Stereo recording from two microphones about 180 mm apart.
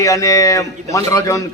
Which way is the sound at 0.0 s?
20° left (ahead or behind).